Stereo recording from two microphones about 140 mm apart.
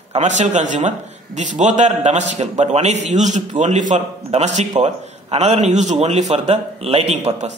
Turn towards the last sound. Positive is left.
turn(degrees=-50)  # may be behind; listen again after turning